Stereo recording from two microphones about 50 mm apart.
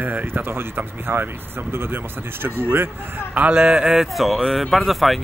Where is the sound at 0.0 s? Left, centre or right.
Right.